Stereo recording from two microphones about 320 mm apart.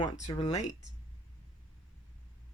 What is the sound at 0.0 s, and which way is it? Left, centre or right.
Speech, centre.